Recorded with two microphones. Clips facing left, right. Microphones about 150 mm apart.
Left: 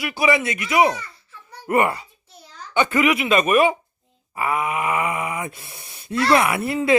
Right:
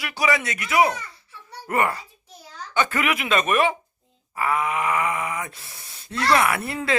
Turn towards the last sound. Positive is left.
turn(degrees=10)  # may be behind; listen again after turning